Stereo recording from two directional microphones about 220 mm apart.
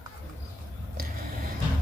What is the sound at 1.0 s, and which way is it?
Vehicle, 40° right (ahead or behind).